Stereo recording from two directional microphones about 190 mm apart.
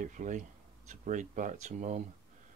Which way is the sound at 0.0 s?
40° right (ahead or behind).